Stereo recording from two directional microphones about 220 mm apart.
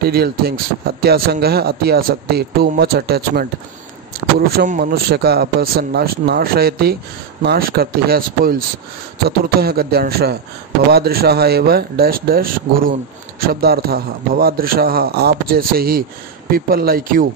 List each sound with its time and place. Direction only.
0.0 s a man's voice: 45° right (ahead or behind)
4.5 s a man's voice: 40° right (ahead or behind)
9.6 s a man's voice: 45° right (ahead or behind)